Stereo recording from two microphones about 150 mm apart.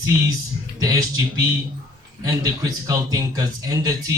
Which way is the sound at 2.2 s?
25° right (ahead or behind).